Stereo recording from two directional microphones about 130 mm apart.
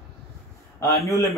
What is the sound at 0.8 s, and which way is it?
Speech, 25° left (ahead or behind).